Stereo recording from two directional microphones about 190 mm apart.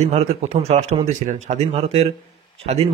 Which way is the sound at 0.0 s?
35° right (ahead or behind).